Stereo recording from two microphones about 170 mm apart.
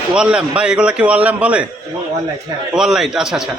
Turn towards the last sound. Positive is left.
turn(degrees=-5)  # may be behind; listen again after turning